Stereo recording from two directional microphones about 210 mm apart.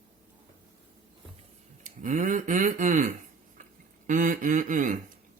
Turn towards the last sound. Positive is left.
turn(degrees=-40)  # may be behind; listen again after turning